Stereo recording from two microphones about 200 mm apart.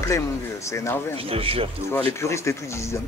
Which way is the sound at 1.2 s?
30° right (ahead or behind).